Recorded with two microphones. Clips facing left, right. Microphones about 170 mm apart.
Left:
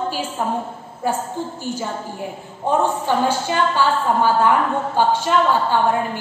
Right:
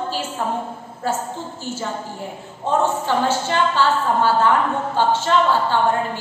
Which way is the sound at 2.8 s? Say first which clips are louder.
Even; 15° left (ahead or behind).